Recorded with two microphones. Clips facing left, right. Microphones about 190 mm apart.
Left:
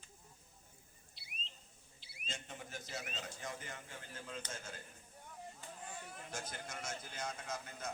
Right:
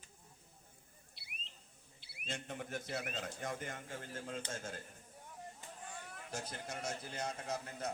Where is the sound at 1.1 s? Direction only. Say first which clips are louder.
Left 3 dB; 60° right (ahead or behind).